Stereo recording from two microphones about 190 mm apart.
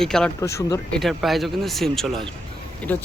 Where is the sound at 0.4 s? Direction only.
15° left (ahead or behind).